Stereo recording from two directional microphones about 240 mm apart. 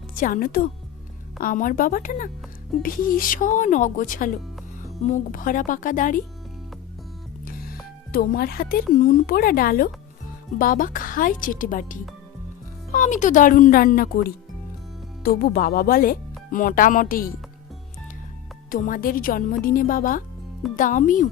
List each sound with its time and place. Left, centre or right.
0.1 s a woman's voice: left
7.4 s speech: left
18.7 s speech: left